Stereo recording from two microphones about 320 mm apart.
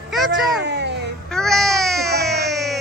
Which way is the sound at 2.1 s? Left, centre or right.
Right.